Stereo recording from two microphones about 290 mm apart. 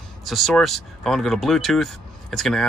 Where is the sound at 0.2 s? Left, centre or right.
Centre.